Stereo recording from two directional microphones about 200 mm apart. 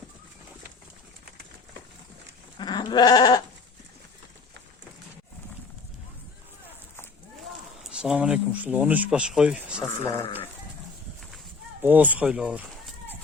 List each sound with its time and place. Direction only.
2.6 s goat: 20° left (ahead or behind)
7.9 s speech: 5° right (ahead or behind)
9.8 s speech: 15° left (ahead or behind)
11.8 s speech: 10° right (ahead or behind)